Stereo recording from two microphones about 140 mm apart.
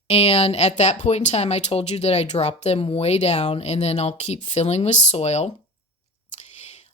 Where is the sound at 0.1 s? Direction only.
50° left (ahead or behind).